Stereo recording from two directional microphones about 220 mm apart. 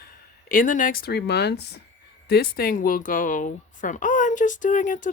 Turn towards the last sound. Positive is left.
turn(degrees=35)  # may be behind; listen again after turning